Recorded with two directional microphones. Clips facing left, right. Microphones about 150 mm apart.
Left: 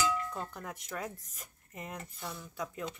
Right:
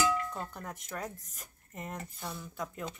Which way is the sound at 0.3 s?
Centre (ahead or behind).